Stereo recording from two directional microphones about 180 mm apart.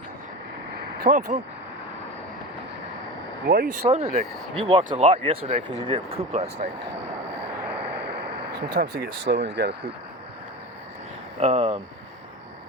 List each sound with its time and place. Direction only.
1.0 s speech: 45° right (ahead or behind)
3.4 s speech: 55° right (ahead or behind)
3.8 s speech: 35° right (ahead or behind)
8.5 s speech: 60° right (ahead or behind)
11.3 s speech: 35° right (ahead or behind)